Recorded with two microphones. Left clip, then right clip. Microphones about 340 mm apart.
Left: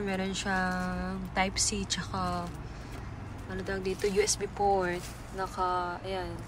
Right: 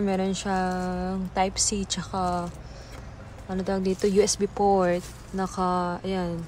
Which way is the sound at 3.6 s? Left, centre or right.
Centre.